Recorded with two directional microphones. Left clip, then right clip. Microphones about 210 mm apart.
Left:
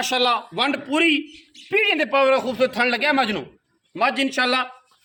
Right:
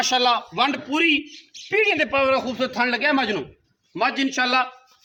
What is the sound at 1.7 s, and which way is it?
A man's voice, 15° left (ahead or behind).